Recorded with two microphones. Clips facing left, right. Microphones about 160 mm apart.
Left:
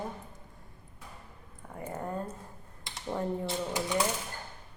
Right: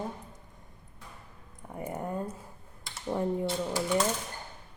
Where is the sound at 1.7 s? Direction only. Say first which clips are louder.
Right 2 dB; 15° right (ahead or behind).